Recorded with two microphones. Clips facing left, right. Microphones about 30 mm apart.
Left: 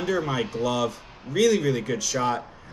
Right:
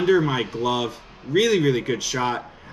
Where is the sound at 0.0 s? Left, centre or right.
Right.